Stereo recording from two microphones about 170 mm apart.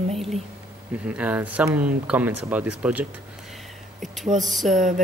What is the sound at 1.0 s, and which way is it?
Speech, 5° right (ahead or behind).